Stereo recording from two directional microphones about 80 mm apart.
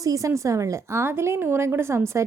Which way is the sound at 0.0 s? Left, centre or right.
Right.